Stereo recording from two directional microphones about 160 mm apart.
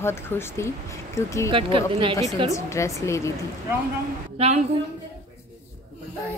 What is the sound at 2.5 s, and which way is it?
Speech, 20° left (ahead or behind).